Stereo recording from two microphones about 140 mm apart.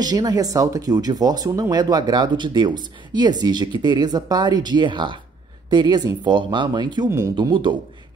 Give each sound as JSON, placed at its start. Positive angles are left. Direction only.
{"t": 0.0, "sound": "speech", "side_deg": -30}
{"t": 7.3, "sound": "speech", "side_deg": -35}